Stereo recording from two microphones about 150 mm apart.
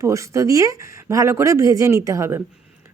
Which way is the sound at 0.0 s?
20° right (ahead or behind).